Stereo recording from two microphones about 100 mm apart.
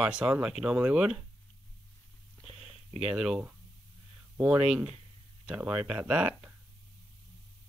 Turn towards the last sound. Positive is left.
turn(degrees=-15)  # may be behind; listen again after turning